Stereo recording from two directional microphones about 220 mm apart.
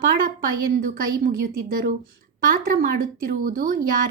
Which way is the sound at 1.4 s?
40° right (ahead or behind).